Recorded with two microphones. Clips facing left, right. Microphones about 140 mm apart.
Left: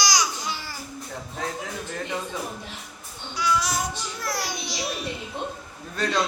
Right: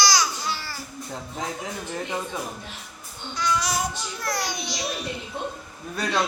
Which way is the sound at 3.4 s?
Centre (ahead or behind).